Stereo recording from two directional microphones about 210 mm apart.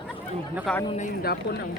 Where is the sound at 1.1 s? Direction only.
45° left (ahead or behind).